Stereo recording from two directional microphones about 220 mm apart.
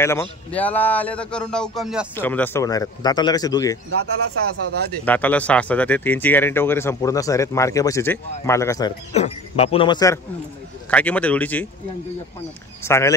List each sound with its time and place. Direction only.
0.0 s speech: 10° left (ahead or behind)
5.0 s speech: 5° left (ahead or behind)
9.1 s speech: 30° left (ahead or behind); by 11.6 s 5° left (ahead or behind)
12.8 s speech: 10° left (ahead or behind)